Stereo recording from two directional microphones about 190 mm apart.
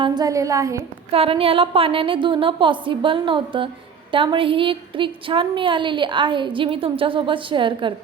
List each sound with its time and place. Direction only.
0.0 s a woman's voice: 20° right (ahead or behind)
1.1 s a woman's voice: 30° right (ahead or behind)